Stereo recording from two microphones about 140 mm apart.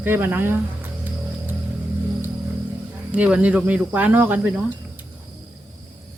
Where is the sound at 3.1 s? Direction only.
10° right (ahead or behind).